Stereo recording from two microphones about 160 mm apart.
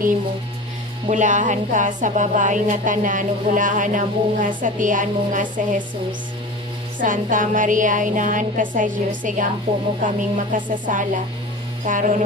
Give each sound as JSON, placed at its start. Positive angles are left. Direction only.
{"t": 1.0, "sound": "a woman's voice", "side_deg": -50}
{"t": 7.0, "sound": "a woman's voice", "side_deg": -55}